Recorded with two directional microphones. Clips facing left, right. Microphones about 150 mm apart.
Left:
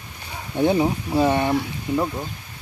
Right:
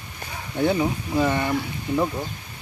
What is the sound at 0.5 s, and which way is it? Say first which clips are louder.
Speech: left 3 dB; 25° left (ahead or behind).